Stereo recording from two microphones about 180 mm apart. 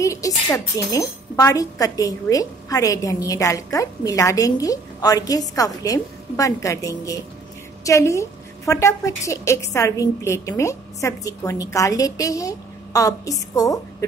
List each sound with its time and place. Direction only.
0.0 s a woman's voice: 15° left (ahead or behind)